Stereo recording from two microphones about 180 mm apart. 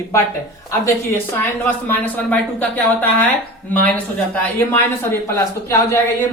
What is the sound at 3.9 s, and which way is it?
Speech, 10° left (ahead or behind).